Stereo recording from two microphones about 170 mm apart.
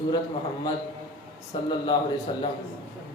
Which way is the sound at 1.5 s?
25° left (ahead or behind).